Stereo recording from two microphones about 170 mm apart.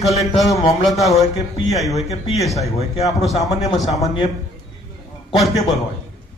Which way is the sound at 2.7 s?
35° left (ahead or behind).